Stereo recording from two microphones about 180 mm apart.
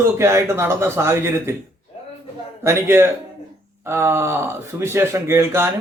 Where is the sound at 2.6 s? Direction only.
15° right (ahead or behind).